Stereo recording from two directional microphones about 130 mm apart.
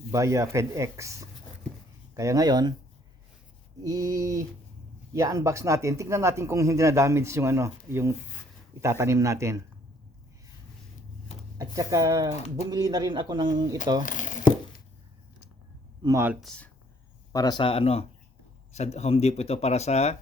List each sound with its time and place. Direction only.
0.1 s speech: 25° right (ahead or behind)
3.8 s speech: 25° right (ahead or behind)
11.5 s speech: 25° right (ahead or behind)
14.0 s a sound: 90° left
16.0 s speech: 35° right (ahead or behind)
16.4 s speech: 5° left (ahead or behind)
17.3 s speech: 30° left (ahead or behind)
17.6 s speech: 45° left (ahead or behind)